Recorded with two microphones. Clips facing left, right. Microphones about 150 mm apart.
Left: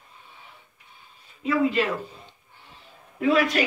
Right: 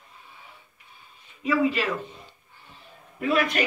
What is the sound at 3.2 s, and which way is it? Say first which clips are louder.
Speech: left 3 dB; 90° left.